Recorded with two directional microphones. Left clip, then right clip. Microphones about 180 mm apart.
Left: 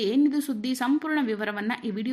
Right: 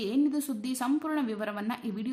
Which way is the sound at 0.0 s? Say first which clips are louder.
Left 5 dB; 15° left (ahead or behind).